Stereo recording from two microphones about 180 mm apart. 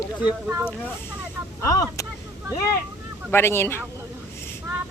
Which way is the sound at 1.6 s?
20° left (ahead or behind).